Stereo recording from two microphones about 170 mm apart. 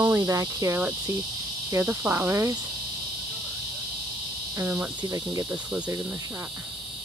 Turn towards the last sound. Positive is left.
turn(degrees=-5)  # may be behind; listen again after turning